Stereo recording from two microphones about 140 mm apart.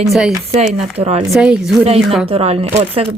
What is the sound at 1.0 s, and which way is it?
Speech, 50° right (ahead or behind).